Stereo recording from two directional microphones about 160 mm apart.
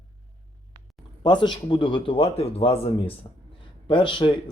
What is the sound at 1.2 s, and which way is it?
A man's voice, 30° left (ahead or behind).